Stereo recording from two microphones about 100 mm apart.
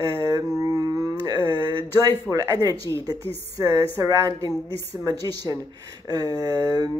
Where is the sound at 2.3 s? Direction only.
35° right (ahead or behind).